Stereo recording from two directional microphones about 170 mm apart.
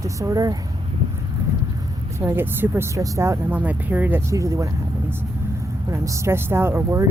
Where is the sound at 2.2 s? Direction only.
15° right (ahead or behind).